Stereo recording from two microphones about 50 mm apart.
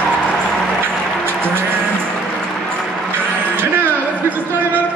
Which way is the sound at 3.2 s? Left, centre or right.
Right.